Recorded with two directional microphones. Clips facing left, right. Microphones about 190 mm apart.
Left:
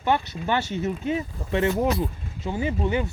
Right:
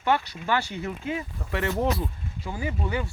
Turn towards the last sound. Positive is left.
turn(degrees=20)  # may be behind; listen again after turning